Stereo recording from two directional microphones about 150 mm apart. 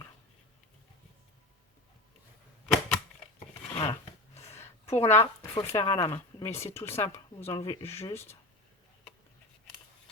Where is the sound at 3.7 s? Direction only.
35° left (ahead or behind).